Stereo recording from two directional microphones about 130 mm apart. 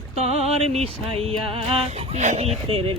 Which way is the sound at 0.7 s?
50° right (ahead or behind).